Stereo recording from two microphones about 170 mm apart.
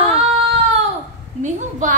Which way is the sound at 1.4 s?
50° right (ahead or behind).